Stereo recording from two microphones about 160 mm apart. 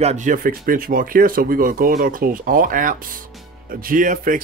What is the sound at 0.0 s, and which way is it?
Speech, 50° right (ahead or behind).